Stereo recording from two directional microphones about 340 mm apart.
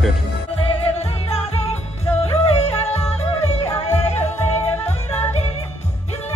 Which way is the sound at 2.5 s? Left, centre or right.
Centre.